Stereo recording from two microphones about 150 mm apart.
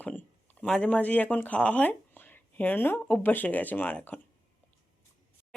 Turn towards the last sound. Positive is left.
turn(degrees=10)  # may be behind; listen again after turning